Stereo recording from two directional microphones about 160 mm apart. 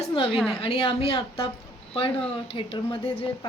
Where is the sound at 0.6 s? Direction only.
35° left (ahead or behind).